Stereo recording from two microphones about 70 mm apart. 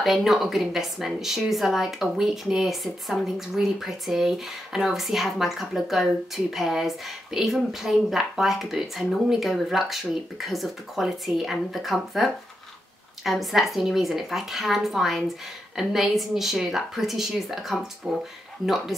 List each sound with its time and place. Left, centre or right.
0.0 s speech: centre